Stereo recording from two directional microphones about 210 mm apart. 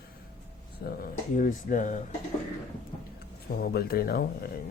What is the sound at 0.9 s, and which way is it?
Speech, 40° left (ahead or behind).